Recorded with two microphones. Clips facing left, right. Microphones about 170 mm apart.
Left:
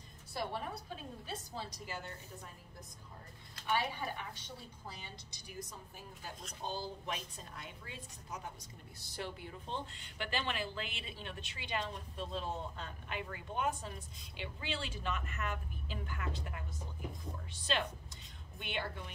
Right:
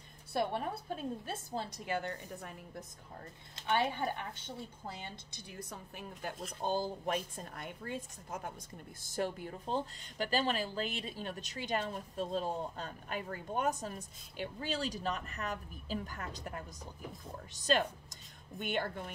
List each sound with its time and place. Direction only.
0.3 s a woman's voice: 55° right (ahead or behind)
3.7 s a woman's voice: 55° right (ahead or behind)
6.6 s a woman's voice: 50° right (ahead or behind)